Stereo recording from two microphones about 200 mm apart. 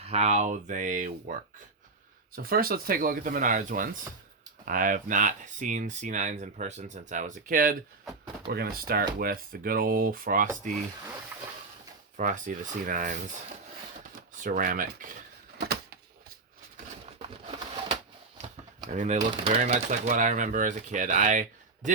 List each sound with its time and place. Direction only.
0.0 s speech: 30° right (ahead or behind)
12.1 s speech: 40° right (ahead or behind)
14.4 s speech: 45° right (ahead or behind)
15.5 s a sound: 55° right (ahead or behind)
18.9 s speech: 35° right (ahead or behind)